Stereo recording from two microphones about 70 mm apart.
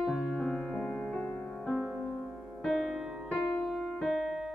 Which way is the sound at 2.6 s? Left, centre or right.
Centre.